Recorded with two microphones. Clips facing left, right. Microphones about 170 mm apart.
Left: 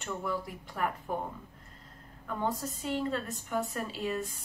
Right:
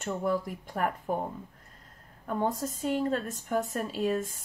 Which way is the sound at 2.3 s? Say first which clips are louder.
Right 4 dB; 45° right (ahead or behind).